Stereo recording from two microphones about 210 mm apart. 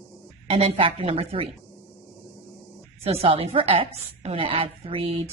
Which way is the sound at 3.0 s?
30° right (ahead or behind).